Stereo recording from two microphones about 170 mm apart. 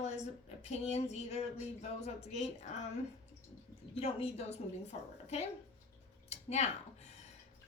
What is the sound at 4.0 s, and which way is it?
A woman's voice, 35° left (ahead or behind).